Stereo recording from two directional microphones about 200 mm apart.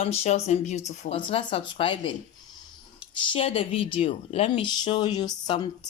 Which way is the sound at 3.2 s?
25° left (ahead or behind).